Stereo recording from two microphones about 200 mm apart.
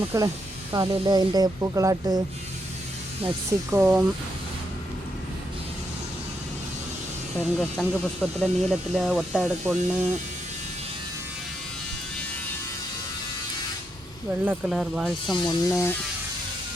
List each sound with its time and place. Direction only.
0.1 s speech: 15° right (ahead or behind)
3.7 s speech: 15° right (ahead or behind)
7.3 s speech: 5° left (ahead or behind)
14.4 s speech: 5° right (ahead or behind)
15.4 s speech: 15° left (ahead or behind)